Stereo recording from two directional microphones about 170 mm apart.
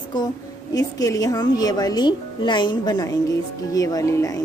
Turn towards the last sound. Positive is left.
turn(degrees=20)  # may be behind; listen again after turning